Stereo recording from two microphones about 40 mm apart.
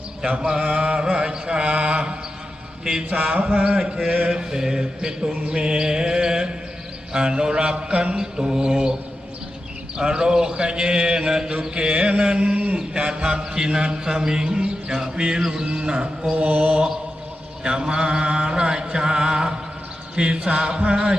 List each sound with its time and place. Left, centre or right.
0.6 s mantra: right
3.8 s mantra: right
8.1 s mantra: centre
10.0 s mantra: right
16.3 s mantra: right
16.6 s mantra: right